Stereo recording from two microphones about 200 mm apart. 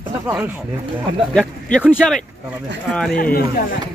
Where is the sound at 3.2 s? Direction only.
45° left (ahead or behind).